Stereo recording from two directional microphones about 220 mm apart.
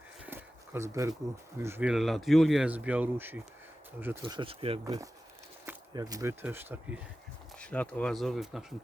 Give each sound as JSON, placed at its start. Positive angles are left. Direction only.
{"t": 0.3, "sound": "a sound", "side_deg": -10}
{"t": 1.5, "sound": "speech", "side_deg": -10}
{"t": 4.4, "sound": "speech", "side_deg": -25}
{"t": 7.6, "sound": "speech", "side_deg": 5}